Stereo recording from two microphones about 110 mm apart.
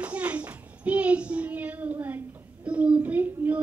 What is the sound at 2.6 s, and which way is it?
Child singing, 10° right (ahead or behind).